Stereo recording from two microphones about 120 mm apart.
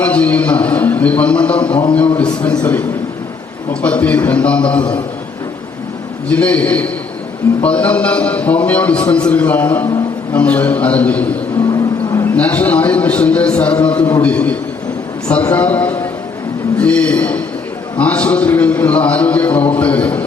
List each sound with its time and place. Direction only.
0.0 s a man's voice: 10° left (ahead or behind)
6.2 s a man's voice: 10° left (ahead or behind)
11.7 s a sound: 25° left (ahead or behind)
12.4 s a man's voice: 10° left (ahead or behind)